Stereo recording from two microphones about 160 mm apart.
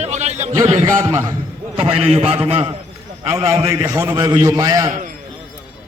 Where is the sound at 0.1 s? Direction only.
45° right (ahead or behind).